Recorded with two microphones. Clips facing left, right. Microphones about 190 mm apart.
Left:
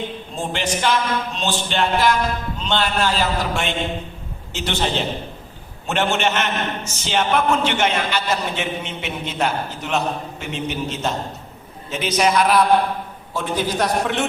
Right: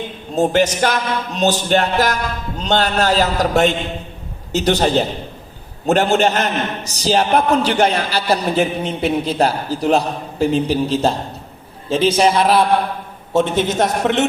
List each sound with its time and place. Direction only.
0.3 s a man's voice: 40° right (ahead or behind); by 14.3 s 20° right (ahead or behind)